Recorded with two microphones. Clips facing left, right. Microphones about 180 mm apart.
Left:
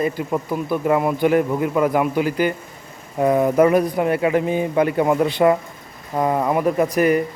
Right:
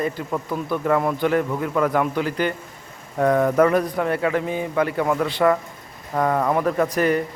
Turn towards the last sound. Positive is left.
turn(degrees=10)  # may be behind; listen again after turning